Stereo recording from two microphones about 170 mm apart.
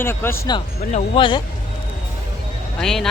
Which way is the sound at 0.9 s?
30° left (ahead or behind).